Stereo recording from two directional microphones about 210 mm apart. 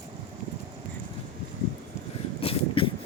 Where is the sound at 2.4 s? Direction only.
25° left (ahead or behind).